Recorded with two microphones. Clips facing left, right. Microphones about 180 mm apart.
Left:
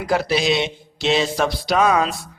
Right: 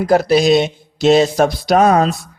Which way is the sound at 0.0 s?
45° right (ahead or behind).